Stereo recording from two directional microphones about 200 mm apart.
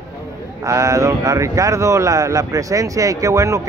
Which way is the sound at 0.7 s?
15° right (ahead or behind).